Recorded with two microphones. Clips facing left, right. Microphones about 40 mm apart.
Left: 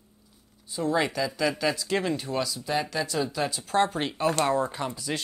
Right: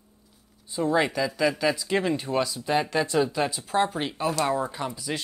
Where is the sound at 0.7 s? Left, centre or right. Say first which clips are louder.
Right 2 dB; centre.